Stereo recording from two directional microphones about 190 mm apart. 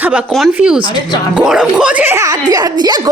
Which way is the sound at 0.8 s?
25° right (ahead or behind).